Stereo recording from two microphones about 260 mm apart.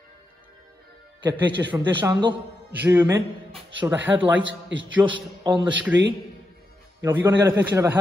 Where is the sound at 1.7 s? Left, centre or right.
Centre.